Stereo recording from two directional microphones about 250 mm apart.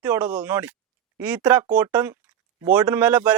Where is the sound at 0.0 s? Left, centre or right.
Centre.